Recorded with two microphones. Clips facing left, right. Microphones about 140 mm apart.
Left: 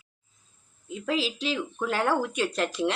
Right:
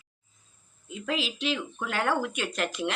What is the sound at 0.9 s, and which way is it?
Speech, 35° left (ahead or behind).